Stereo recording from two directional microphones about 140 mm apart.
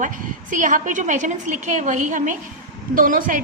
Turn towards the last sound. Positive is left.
turn(degrees=-75)  # may be behind; listen again after turning